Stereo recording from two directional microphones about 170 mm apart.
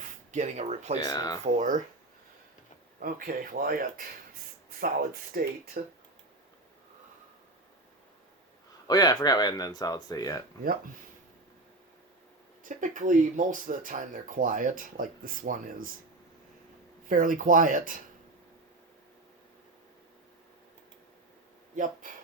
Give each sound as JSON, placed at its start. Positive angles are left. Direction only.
{"t": 0.3, "sound": "speech", "side_deg": -45}
{"t": 1.0, "sound": "speech", "side_deg": 20}
{"t": 1.5, "sound": "speech", "side_deg": -50}
{"t": 3.0, "sound": "speech", "side_deg": -55}
{"t": 8.9, "sound": "speech", "side_deg": 25}
{"t": 12.6, "sound": "speech", "side_deg": -50}
{"t": 17.1, "sound": "speech", "side_deg": -50}